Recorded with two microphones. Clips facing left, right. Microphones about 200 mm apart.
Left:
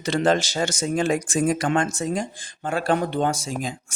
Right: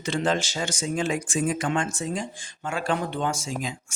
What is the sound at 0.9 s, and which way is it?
Speech, 60° left (ahead or behind).